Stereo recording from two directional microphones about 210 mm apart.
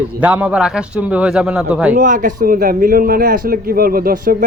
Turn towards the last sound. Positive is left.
turn(degrees=-45)  # may be behind; listen again after turning